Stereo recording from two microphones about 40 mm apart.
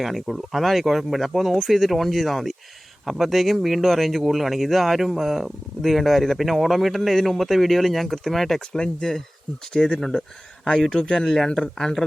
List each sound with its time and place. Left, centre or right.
0.0 s speech: centre
8.7 s speech: centre
9.8 s speech: centre
11.4 s speech: centre